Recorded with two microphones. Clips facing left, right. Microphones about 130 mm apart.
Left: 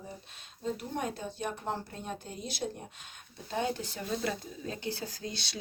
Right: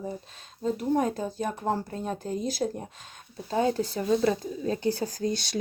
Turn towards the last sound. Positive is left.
turn(degrees=-50)  # may be behind; listen again after turning